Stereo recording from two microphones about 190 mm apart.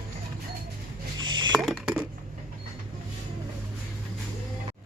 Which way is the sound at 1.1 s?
25° right (ahead or behind).